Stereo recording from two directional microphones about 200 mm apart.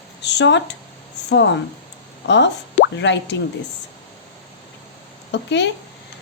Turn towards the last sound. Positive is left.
turn(degrees=60)  # may be behind; listen again after turning